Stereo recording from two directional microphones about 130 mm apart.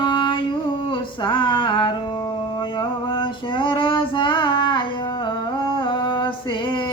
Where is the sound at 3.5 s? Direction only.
40° left (ahead or behind).